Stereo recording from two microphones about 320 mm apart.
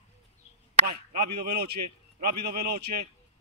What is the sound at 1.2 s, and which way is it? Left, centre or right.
Speech, right.